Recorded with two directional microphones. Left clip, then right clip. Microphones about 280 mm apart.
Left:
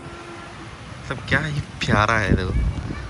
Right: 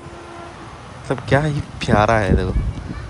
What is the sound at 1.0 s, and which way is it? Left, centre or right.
Speech, centre.